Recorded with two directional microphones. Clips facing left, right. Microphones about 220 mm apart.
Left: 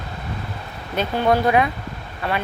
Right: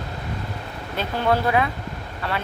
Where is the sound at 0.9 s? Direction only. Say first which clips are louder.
Left 3 dB; 20° left (ahead or behind).